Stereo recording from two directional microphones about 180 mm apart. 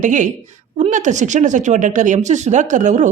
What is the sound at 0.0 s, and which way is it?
A woman's voice, 45° right (ahead or behind).